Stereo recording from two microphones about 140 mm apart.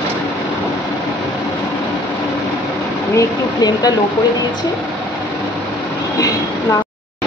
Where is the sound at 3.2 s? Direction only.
25° left (ahead or behind).